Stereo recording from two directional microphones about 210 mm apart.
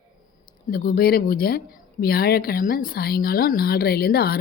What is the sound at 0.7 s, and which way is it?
Speech, 45° left (ahead or behind).